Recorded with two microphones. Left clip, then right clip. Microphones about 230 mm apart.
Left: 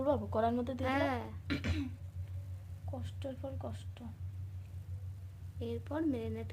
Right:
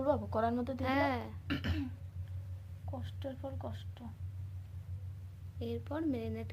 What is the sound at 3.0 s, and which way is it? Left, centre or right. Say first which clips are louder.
A woman's voice: even; centre.